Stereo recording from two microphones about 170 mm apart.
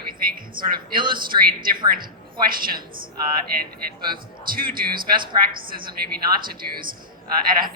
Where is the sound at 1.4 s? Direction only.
60° right (ahead or behind).